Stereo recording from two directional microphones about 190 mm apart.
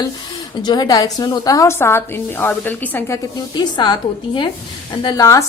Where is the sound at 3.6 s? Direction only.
20° left (ahead or behind).